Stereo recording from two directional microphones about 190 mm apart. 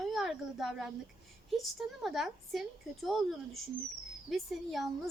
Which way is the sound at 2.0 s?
Centre (ahead or behind).